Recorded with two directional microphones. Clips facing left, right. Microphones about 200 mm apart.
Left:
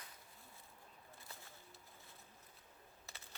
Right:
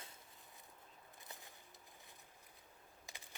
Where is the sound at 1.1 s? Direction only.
15° right (ahead or behind).